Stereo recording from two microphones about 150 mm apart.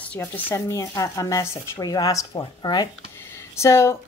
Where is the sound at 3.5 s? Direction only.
20° left (ahead or behind).